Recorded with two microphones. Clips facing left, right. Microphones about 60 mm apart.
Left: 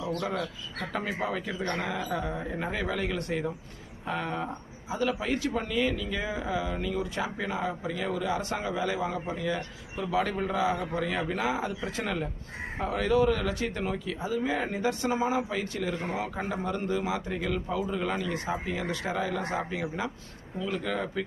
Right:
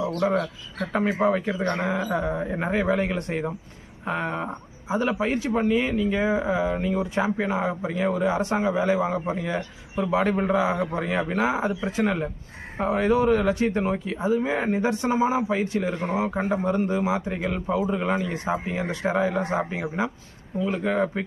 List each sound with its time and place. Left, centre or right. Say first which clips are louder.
0.3 s a man's voice: right 7 dB; right